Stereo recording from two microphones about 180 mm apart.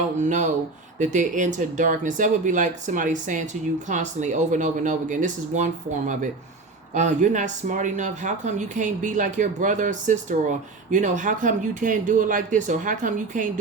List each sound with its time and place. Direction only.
0.2 s speech: 40° right (ahead or behind)